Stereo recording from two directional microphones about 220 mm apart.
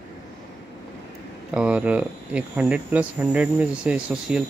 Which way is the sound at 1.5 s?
5° right (ahead or behind).